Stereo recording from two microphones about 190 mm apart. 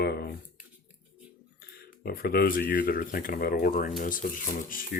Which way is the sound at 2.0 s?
50° left (ahead or behind).